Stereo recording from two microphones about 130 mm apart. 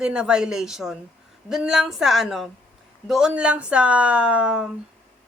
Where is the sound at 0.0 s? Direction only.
5° right (ahead or behind).